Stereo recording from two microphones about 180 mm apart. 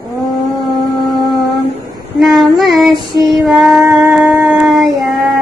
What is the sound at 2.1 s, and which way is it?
Child singing, centre (ahead or behind).